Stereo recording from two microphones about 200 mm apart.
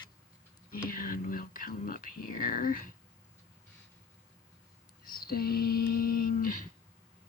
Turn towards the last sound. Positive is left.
turn(degrees=40)  # may be behind; listen again after turning